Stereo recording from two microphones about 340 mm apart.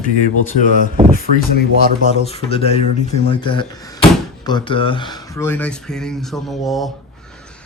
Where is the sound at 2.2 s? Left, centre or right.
Centre.